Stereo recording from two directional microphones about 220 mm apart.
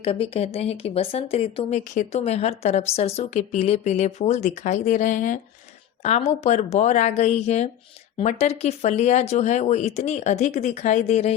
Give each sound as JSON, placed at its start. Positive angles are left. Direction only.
{"t": 0.0, "sound": "speech", "side_deg": 25}